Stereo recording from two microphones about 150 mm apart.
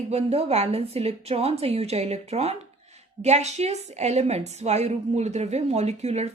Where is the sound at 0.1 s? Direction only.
45° right (ahead or behind).